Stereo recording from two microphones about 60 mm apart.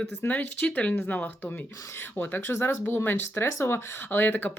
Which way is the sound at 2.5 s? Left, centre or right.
Left.